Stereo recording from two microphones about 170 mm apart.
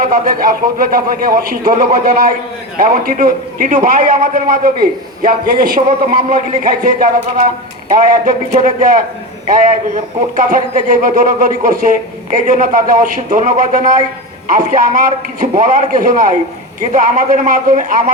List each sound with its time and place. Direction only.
0.0 s a man's voice: 55° right (ahead or behind)